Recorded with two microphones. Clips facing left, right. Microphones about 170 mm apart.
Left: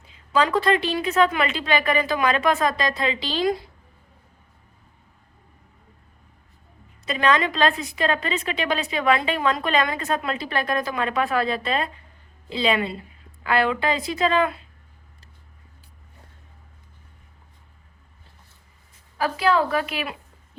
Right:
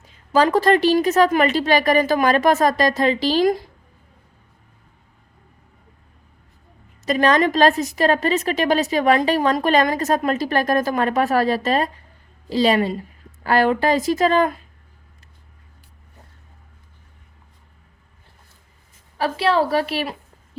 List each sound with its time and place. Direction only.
0.3 s a woman's voice: 45° right (ahead or behind)
7.0 s a woman's voice: 40° right (ahead or behind)
19.1 s a woman's voice: 30° right (ahead or behind)